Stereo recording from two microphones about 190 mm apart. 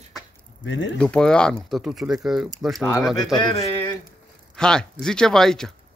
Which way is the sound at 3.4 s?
25° left (ahead or behind).